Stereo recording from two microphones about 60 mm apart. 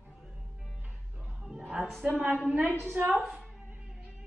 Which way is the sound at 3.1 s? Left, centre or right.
Right.